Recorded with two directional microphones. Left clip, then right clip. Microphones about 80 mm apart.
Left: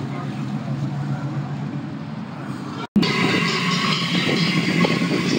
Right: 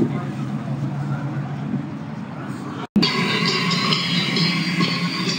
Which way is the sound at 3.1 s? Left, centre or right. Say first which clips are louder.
Left 2 dB; centre.